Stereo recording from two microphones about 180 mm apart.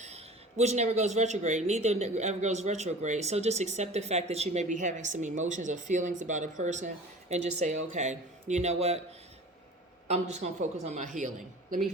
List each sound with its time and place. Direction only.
0.0 s speech: 35° right (ahead or behind)
10.1 s speech: 40° right (ahead or behind)